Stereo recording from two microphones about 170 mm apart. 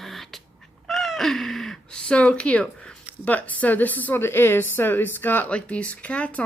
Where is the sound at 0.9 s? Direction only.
Centre (ahead or behind).